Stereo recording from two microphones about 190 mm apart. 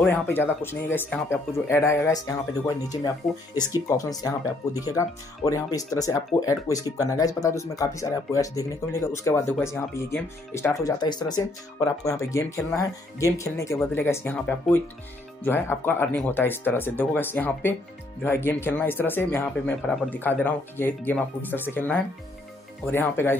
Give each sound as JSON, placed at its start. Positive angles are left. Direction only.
{"t": 0.0, "sound": "speech", "side_deg": 10}